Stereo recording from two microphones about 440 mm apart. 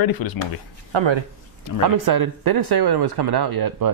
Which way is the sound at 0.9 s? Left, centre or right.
Right.